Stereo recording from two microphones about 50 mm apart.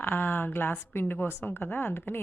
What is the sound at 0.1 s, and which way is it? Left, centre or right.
A woman's voice, left.